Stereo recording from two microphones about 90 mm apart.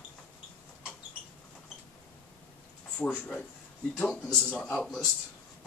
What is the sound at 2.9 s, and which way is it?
Speech, 15° left (ahead or behind).